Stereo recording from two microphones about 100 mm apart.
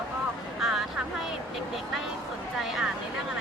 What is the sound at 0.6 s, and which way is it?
Vehicle, 5° right (ahead or behind).